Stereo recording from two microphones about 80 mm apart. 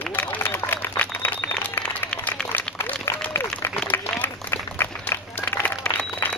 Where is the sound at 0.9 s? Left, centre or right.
Left.